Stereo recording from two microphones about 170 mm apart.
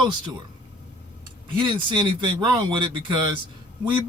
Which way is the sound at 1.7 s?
30° right (ahead or behind).